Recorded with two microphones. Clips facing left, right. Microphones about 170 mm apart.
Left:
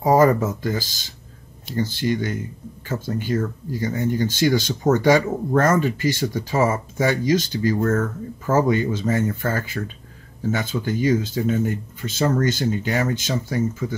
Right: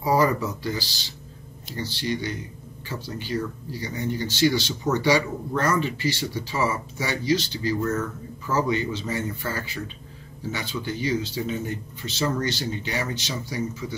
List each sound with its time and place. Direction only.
0.0 s speech: 45° left (ahead or behind)